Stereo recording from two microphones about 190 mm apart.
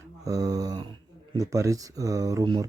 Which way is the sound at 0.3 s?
20° right (ahead or behind).